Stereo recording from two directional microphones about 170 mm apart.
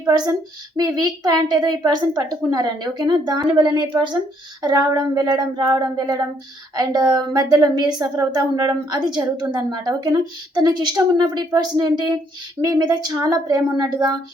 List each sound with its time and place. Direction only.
0.1 s speech: 25° right (ahead or behind)